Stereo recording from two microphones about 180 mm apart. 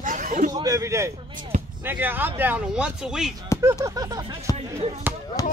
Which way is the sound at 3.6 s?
20° right (ahead or behind).